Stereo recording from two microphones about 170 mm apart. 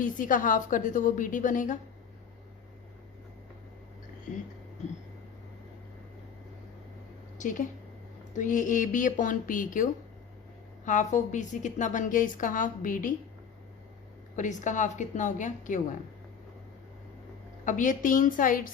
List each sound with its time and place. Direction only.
0.0 s a woman's voice: 50° left (ahead or behind)
7.3 s a woman's voice: 50° left (ahead or behind)
14.3 s a woman's voice: 45° left (ahead or behind)
17.7 s a woman's voice: 50° left (ahead or behind)